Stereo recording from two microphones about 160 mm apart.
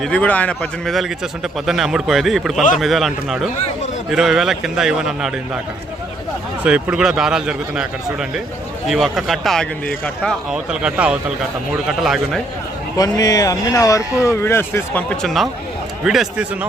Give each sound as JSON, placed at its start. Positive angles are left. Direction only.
{"t": 0.0, "sound": "speech", "side_deg": 10}
{"t": 6.6, "sound": "speech", "side_deg": -10}
{"t": 13.0, "sound": "speech", "side_deg": 20}